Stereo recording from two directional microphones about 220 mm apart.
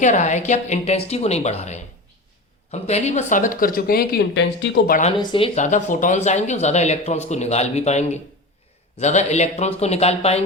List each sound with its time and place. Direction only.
0.0 s speech: 35° left (ahead or behind); by 4.9 s 50° left (ahead or behind)
5.1 s a man's voice: 20° left (ahead or behind)